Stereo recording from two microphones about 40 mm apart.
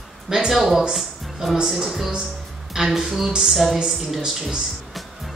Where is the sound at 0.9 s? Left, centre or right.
Centre.